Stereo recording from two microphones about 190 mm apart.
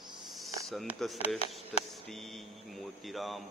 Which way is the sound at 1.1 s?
35° left (ahead or behind).